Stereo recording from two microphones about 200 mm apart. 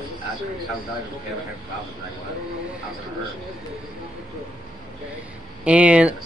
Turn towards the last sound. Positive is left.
turn(degrees=-5)  # may be behind; listen again after turning